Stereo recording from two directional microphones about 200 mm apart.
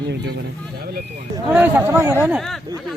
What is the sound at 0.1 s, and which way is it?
Speech, 55° right (ahead or behind).